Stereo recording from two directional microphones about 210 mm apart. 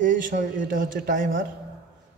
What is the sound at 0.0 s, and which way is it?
A man's voice, 40° right (ahead or behind).